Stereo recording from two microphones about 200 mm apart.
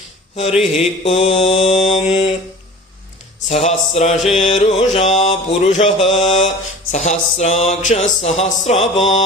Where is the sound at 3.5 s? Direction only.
35° left (ahead or behind).